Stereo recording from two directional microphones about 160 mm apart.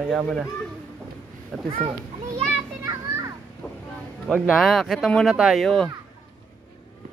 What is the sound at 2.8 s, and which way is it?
Children playing, 20° right (ahead or behind).